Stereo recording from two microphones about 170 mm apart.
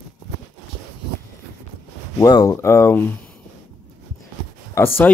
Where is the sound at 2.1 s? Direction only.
20° left (ahead or behind).